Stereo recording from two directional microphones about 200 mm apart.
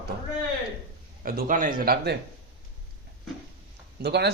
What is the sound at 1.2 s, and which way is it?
Speech, 45° right (ahead or behind).